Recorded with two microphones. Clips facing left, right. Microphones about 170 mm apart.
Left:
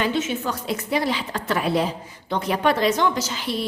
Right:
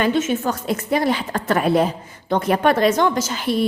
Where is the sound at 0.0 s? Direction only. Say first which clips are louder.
Right 5 dB; 50° right (ahead or behind).